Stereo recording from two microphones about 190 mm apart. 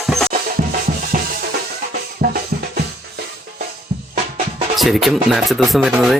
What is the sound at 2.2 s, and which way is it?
Music, 45° right (ahead or behind).